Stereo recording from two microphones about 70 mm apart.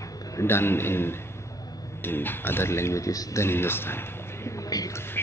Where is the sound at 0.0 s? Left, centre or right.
Left.